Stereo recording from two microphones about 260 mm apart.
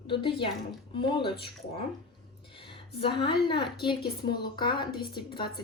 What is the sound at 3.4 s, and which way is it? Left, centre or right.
A woman's voice, centre.